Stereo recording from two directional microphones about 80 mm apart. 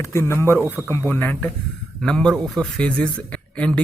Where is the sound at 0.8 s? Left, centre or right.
Left.